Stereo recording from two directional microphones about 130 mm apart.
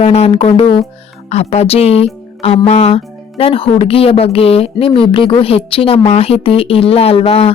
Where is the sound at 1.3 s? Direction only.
55° left (ahead or behind).